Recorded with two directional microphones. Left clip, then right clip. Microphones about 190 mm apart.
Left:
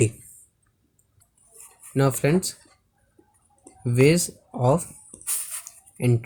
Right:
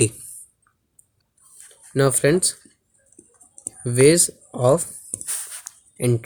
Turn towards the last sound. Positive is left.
turn(degrees=-45)  # may be behind; listen again after turning